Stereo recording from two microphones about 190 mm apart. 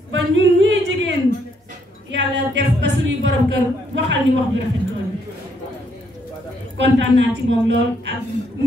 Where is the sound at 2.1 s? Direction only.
70° right (ahead or behind).